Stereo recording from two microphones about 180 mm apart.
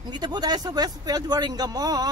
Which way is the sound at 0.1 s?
20° right (ahead or behind).